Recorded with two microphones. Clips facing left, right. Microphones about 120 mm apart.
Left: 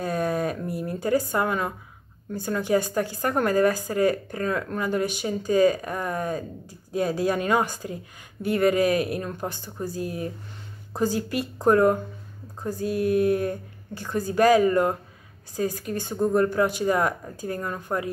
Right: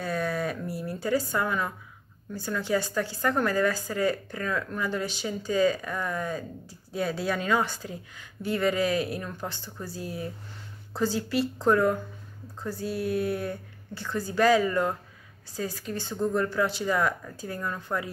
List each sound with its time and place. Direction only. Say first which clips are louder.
0.0 s a sound: left 4 dB; 50° left (ahead or behind)
0.7 s a woman's voice: left 3 dB; 50° left (ahead or behind)
9.2 s speech: left 4 dB; 20° left (ahead or behind)
9.8 s speech: left 5 dB; 50° left (ahead or behind)
17.9 s speech: left 4 dB; 30° left (ahead or behind)